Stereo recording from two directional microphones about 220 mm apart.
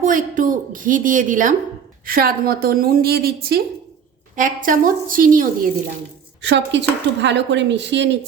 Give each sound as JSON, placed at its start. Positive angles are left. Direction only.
{"t": 0.0, "sound": "a woman's voice", "side_deg": -35}
{"t": 6.4, "sound": "a woman's voice", "side_deg": -55}